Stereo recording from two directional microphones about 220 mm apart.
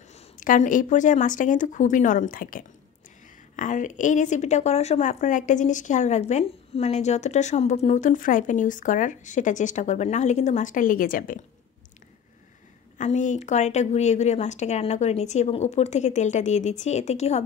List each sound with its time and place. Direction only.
0.1 s speech: 35° left (ahead or behind)
12.9 s speech: 35° left (ahead or behind)